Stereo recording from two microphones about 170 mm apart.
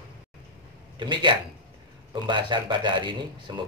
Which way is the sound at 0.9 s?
25° right (ahead or behind).